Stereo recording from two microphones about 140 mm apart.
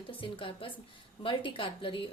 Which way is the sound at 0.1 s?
40° left (ahead or behind).